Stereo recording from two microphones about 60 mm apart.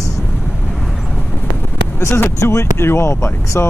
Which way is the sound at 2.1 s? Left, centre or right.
Left.